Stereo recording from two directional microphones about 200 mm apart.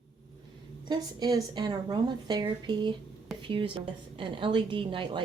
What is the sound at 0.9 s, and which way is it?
A woman's voice, 20° right (ahead or behind).